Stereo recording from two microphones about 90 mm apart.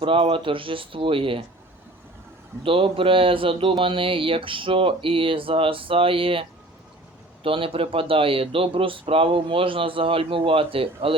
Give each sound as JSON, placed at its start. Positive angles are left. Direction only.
{"t": 0.0, "sound": "speech", "side_deg": -80}
{"t": 2.6, "sound": "speech", "side_deg": -90}
{"t": 7.4, "sound": "speech", "side_deg": -90}